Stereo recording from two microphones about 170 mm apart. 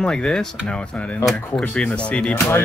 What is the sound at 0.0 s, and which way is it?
Speech, 5° left (ahead or behind).